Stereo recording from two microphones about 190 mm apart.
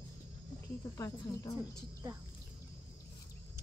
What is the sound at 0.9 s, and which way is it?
Speech, 15° left (ahead or behind).